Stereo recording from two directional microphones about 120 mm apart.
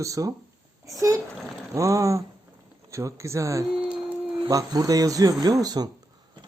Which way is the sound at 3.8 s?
10° right (ahead or behind).